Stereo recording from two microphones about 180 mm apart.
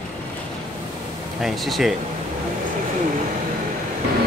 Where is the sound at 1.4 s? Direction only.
Centre (ahead or behind).